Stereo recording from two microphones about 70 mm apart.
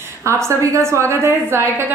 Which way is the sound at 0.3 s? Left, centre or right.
Right.